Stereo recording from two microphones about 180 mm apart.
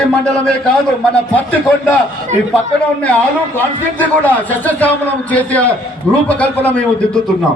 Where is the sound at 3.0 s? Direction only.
10° left (ahead or behind).